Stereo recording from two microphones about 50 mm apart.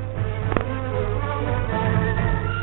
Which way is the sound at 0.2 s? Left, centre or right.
Left.